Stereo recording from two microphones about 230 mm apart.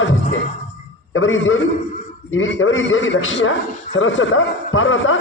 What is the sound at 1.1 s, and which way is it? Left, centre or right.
A man's voice, left.